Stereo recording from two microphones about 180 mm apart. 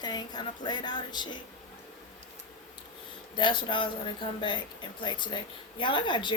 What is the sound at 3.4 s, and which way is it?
Speech, 25° left (ahead or behind).